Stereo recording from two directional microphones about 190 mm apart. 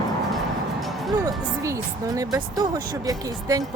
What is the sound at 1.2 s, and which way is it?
A woman's voice, 15° right (ahead or behind).